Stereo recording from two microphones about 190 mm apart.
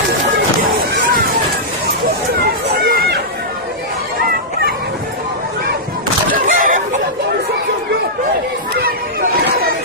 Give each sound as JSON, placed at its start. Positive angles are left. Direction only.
{"t": 2.7, "sound": "chatter", "side_deg": -55}
{"t": 6.5, "sound": "chicken", "side_deg": -45}